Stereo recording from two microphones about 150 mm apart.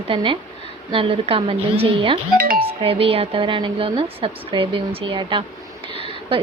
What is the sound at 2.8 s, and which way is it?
A woman's voice, 40° right (ahead or behind).